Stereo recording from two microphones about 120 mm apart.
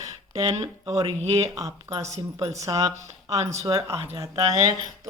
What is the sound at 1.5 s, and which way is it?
A man's voice, 30° right (ahead or behind).